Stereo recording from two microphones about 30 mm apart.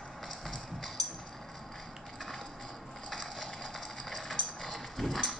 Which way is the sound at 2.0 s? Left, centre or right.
Centre.